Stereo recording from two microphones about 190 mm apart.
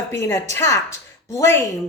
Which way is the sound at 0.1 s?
15° left (ahead or behind).